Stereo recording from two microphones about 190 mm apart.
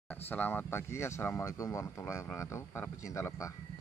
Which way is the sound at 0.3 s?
10° left (ahead or behind).